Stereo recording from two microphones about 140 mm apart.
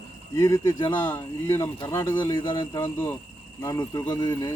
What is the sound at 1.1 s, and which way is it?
Speech, 15° left (ahead or behind).